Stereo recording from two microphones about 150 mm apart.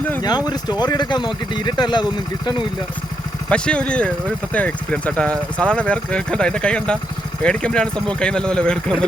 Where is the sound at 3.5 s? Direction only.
5° left (ahead or behind).